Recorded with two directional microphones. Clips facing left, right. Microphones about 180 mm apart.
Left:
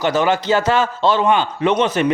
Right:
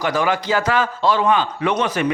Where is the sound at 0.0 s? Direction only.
25° left (ahead or behind).